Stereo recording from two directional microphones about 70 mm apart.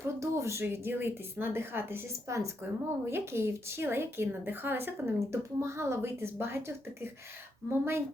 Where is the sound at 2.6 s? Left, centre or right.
Right.